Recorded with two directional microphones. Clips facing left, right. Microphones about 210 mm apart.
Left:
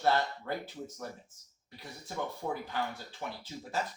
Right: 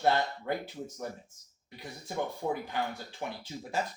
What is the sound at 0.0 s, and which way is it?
Speech, 15° right (ahead or behind).